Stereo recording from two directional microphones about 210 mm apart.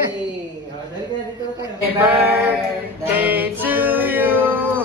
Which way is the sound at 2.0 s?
10° right (ahead or behind).